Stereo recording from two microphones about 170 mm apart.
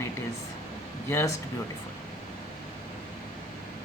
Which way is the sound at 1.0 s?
10° left (ahead or behind).